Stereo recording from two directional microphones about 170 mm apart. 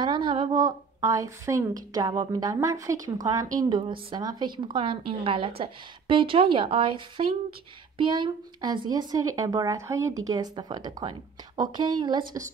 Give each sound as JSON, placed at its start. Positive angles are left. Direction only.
{"t": 0.0, "sound": "speech", "side_deg": -25}